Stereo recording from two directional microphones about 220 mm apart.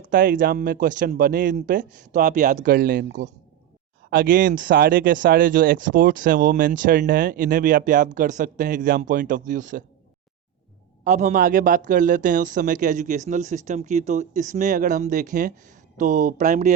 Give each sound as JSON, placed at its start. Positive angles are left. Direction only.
{"t": 0.0, "sound": "speech", "side_deg": -40}
{"t": 11.0, "sound": "speech", "side_deg": -35}